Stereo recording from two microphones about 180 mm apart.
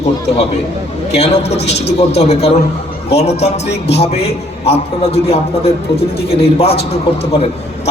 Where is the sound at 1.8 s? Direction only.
35° left (ahead or behind).